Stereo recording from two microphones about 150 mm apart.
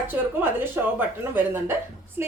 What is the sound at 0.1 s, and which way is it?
A woman's voice, 15° right (ahead or behind).